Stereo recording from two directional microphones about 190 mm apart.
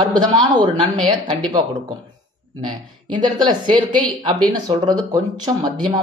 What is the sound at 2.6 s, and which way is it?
Speech, 25° right (ahead or behind).